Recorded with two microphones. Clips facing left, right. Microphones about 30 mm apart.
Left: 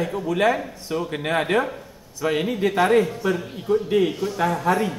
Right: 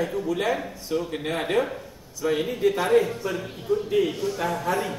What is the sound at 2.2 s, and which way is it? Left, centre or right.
Speech, left.